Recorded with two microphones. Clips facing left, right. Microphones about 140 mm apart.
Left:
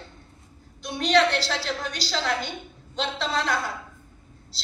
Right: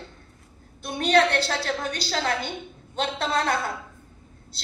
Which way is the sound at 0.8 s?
55° right (ahead or behind).